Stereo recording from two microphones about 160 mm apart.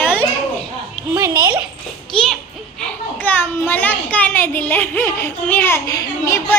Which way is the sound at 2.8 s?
10° left (ahead or behind).